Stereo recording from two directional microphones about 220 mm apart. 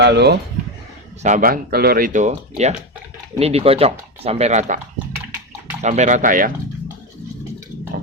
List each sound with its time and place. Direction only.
0.0 s speech: 50° right (ahead or behind)
1.2 s speech: 35° right (ahead or behind)
5.8 s speech: 30° right (ahead or behind)